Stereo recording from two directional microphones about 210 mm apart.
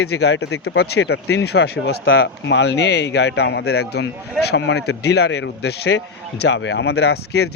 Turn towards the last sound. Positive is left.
turn(degrees=50)  # may be behind; listen again after turning